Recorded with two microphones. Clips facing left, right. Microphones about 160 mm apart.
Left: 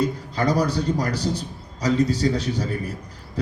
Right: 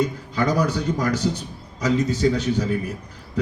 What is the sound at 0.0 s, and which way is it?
A man's voice, 35° left (ahead or behind).